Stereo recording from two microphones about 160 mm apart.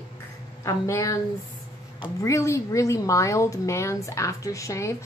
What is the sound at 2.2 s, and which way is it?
Speech, 20° left (ahead or behind).